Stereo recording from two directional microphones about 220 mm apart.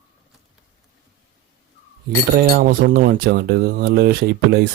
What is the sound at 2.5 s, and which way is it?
Speech, 40° right (ahead or behind).